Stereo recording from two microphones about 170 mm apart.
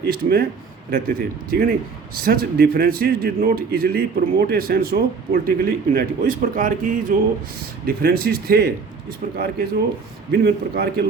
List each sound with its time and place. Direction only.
0.1 s a man's voice: 65° right (ahead or behind)